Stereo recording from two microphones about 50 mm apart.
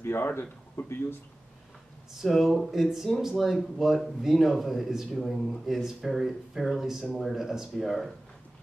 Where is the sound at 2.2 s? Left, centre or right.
Centre.